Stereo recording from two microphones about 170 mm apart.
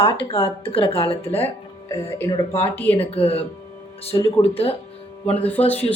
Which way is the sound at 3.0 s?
35° left (ahead or behind).